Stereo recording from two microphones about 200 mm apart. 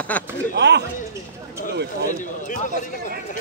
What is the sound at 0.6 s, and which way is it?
Speech, 60° right (ahead or behind).